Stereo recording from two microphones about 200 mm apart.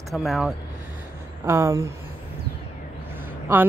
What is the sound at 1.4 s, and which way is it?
Speech, 15° right (ahead or behind).